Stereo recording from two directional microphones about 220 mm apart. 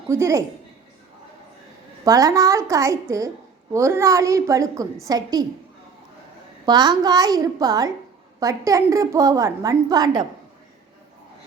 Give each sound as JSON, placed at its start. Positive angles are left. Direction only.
{"t": 0.1, "sound": "a woman's voice", "side_deg": -10}
{"t": 2.0, "sound": "a woman's voice", "side_deg": -15}
{"t": 6.7, "sound": "a woman's voice", "side_deg": -20}